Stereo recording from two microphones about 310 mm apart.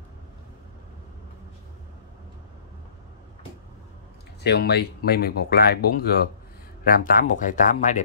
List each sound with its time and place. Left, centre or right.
4.4 s speech: left